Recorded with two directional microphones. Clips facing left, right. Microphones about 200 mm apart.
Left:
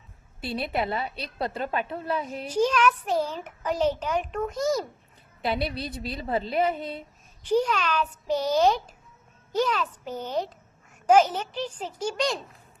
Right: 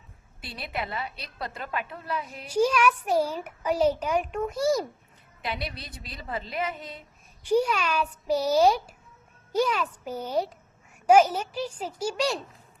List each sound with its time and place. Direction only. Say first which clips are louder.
0.4 s a woman's voice: left 7 dB; 25° left (ahead or behind)
2.5 s a child's voice: even; 10° right (ahead or behind)
5.5 s a woman's voice: left 6 dB; 30° left (ahead or behind)
7.4 s a child's voice: even; 10° right (ahead or behind)